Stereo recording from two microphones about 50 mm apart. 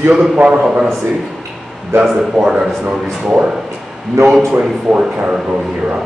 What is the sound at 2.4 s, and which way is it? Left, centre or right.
Speech, centre.